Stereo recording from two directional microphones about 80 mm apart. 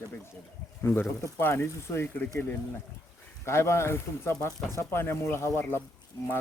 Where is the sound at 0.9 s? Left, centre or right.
Left.